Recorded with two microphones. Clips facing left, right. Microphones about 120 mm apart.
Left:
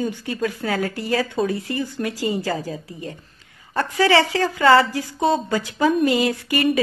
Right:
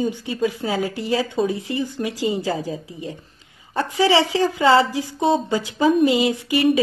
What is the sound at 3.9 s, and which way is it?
Speech, 15° right (ahead or behind).